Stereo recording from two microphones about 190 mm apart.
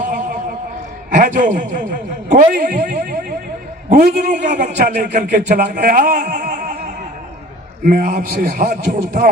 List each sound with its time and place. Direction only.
1.1 s a man's voice: 45° right (ahead or behind)
7.9 s speech: 45° right (ahead or behind)